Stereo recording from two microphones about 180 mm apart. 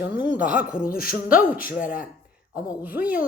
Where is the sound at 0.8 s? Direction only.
55° left (ahead or behind).